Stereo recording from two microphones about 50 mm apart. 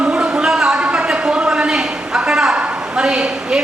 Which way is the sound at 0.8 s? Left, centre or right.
Right.